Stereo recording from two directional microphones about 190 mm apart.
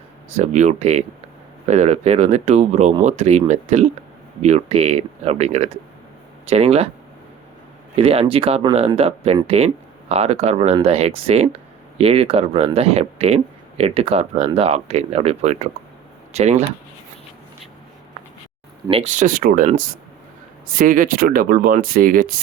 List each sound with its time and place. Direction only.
0.3 s speech: 40° right (ahead or behind)
7.9 s speech: 30° right (ahead or behind)
18.9 s speech: 35° right (ahead or behind)